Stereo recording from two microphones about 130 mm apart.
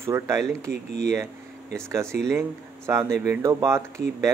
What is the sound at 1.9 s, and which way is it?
Speech, 20° right (ahead or behind).